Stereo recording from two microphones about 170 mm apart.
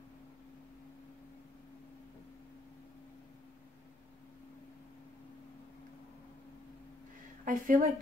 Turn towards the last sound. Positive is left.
turn(degrees=-50)  # may be behind; listen again after turning